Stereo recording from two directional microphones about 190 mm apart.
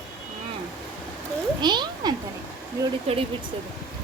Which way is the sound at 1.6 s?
25° right (ahead or behind).